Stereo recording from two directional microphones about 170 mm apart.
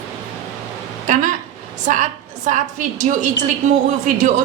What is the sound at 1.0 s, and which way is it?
Speech, 50° right (ahead or behind).